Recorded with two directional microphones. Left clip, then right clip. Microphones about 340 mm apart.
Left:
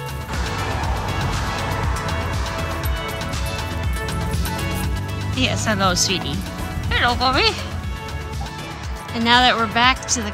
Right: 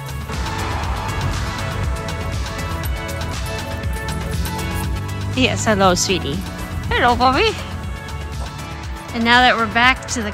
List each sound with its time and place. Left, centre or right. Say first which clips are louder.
3.2 s music: even; centre
5.3 s speech: right 4 dB; centre
9.1 s speech: right 2 dB; centre